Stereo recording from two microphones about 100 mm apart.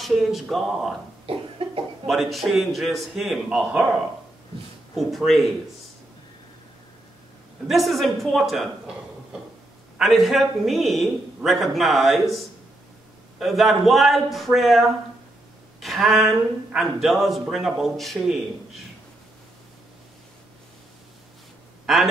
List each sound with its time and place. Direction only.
0.0 s speech: centre (ahead or behind)
1.3 s cough: 70° right (ahead or behind)
2.0 s speech: centre (ahead or behind)
4.9 s speech: centre (ahead or behind)
7.6 s speech: centre (ahead or behind)
9.9 s speech: centre (ahead or behind)